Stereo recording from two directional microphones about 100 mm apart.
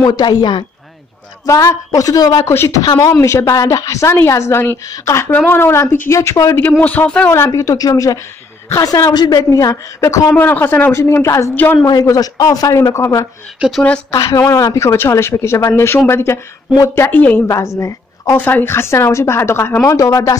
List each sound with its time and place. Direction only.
0.0 s a woman's voice: 40° left (ahead or behind)
1.4 s a woman's voice: 35° left (ahead or behind)
2.4 s speech: 25° left (ahead or behind)
2.8 s a woman's voice: 40° left (ahead or behind)
6.8 s speech: 15° left (ahead or behind)
7.3 s a woman's voice: 25° left (ahead or behind)
10.4 s speech: 20° left (ahead or behind)
11.5 s speech: 20° left (ahead or behind)
11.8 s a woman's voice: 40° left (ahead or behind)
13.6 s speech: centre (ahead or behind)
14.1 s speech: 35° left (ahead or behind); by 17.4 s 20° left (ahead or behind)
17.7 s a woman's voice: 30° left (ahead or behind)
18.4 s speech: 20° left (ahead or behind)
19.8 s a woman's voice: 30° left (ahead or behind)